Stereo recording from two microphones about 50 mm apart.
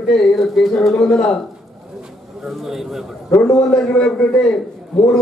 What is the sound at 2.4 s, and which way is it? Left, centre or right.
Speech, centre.